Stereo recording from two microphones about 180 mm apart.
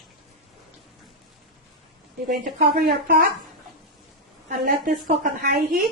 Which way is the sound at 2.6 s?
60° right (ahead or behind).